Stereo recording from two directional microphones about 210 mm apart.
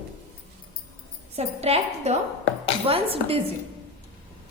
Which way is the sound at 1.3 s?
30° right (ahead or behind).